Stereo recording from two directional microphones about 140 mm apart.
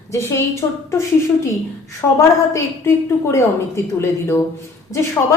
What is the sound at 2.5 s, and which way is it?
A woman's voice, 20° left (ahead or behind).